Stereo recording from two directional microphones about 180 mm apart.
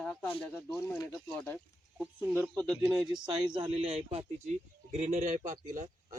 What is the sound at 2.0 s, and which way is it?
Speech, 15° right (ahead or behind).